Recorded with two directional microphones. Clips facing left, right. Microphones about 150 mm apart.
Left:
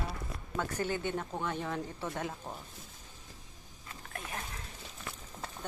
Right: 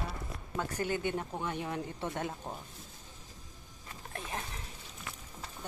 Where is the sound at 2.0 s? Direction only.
25° right (ahead or behind).